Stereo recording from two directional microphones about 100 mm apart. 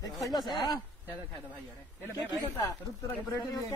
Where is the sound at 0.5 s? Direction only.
45° left (ahead or behind).